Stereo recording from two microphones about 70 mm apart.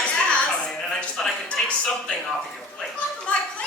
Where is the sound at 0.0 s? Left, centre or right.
Centre.